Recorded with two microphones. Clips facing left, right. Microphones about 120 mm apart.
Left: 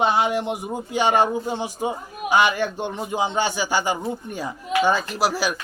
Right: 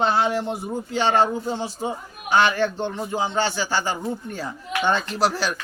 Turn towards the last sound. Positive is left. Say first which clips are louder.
# even
turn(degrees=10)  # may be behind; listen again after turning